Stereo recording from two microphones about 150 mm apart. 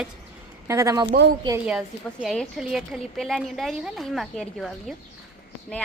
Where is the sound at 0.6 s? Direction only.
20° right (ahead or behind).